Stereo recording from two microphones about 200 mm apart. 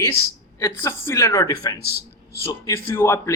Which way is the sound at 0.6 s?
15° left (ahead or behind).